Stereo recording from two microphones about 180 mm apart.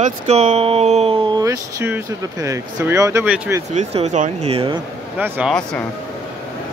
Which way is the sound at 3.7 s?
40° right (ahead or behind).